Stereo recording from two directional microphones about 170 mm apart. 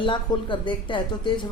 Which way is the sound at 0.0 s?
30° left (ahead or behind).